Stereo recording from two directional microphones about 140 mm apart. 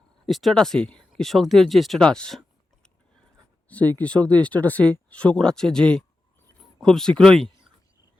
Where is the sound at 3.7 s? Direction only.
10° left (ahead or behind).